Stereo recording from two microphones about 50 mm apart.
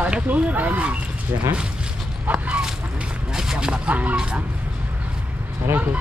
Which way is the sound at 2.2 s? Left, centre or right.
Right.